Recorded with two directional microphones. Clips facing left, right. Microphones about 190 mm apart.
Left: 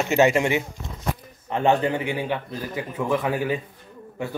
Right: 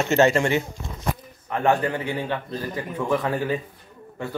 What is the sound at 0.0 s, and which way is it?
A man's voice, 10° left (ahead or behind).